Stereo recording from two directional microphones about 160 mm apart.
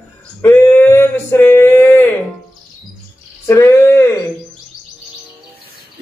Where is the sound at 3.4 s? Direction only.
15° left (ahead or behind).